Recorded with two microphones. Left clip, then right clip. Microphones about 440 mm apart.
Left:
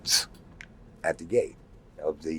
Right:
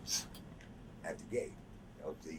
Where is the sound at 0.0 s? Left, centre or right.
Left.